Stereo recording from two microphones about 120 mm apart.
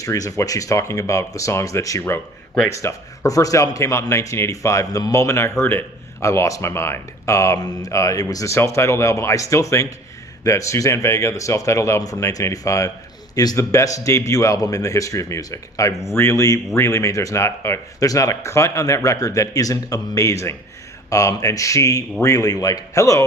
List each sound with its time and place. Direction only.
0.0 s a man's voice: 30° left (ahead or behind)